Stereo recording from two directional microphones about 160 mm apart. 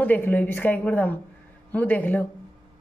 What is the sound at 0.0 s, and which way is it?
Speech, 10° left (ahead or behind).